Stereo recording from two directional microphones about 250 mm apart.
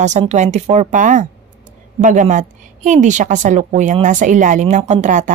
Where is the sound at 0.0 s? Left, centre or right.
Right.